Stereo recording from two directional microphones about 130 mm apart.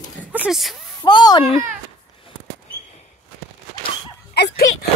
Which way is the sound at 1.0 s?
35° left (ahead or behind).